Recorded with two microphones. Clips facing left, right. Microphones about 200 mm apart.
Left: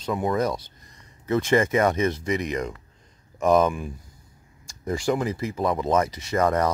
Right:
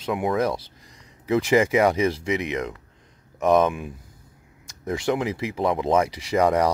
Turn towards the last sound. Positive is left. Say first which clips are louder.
# right 2 dB
turn(degrees=-10)  # may be behind; listen again after turning